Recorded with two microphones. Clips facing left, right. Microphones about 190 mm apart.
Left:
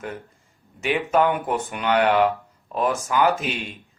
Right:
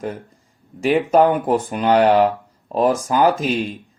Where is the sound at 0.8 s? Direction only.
35° right (ahead or behind).